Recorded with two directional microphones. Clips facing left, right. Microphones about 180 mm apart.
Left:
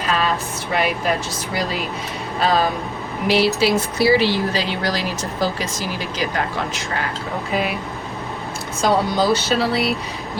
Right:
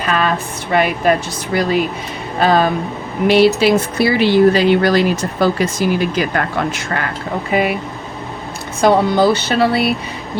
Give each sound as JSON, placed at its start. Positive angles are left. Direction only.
{"t": 0.0, "sound": "a sound", "side_deg": -60}
{"t": 0.7, "sound": "speech", "side_deg": -55}
{"t": 2.4, "sound": "speech", "side_deg": -60}
{"t": 8.8, "sound": "speech", "side_deg": -60}